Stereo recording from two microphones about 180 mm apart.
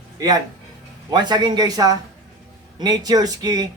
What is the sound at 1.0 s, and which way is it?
Speech, 25° right (ahead or behind).